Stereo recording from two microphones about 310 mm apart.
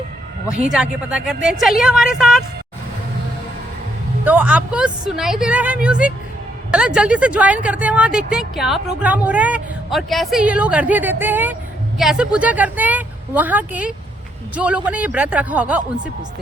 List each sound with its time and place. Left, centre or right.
0.4 s speech: centre
4.2 s speech: centre